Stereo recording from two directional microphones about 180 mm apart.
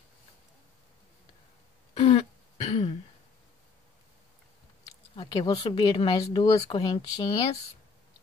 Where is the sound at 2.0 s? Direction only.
35° left (ahead or behind).